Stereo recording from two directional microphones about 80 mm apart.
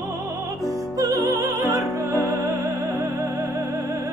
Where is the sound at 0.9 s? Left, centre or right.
Right.